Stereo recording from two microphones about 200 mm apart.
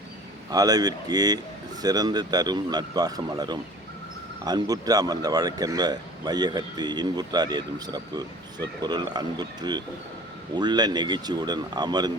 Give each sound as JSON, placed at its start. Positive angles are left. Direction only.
{"t": 0.5, "sound": "speech", "side_deg": -20}